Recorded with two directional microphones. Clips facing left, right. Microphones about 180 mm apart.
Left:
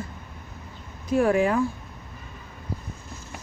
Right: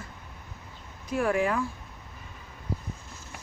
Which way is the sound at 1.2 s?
30° left (ahead or behind).